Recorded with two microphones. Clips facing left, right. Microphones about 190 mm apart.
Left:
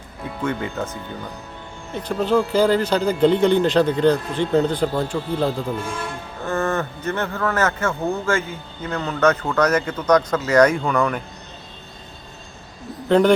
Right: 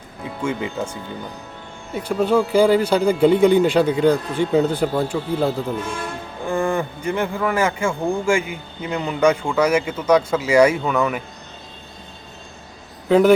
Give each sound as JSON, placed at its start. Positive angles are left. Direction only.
{"t": 0.4, "sound": "a man's voice", "side_deg": -10}
{"t": 13.1, "sound": "speech", "side_deg": -5}